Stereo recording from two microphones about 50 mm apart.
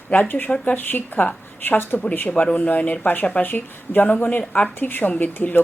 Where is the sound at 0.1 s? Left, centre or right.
Left.